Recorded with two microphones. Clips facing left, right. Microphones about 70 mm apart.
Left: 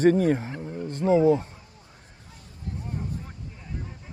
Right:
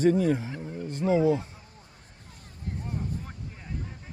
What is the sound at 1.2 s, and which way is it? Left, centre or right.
Speech, left.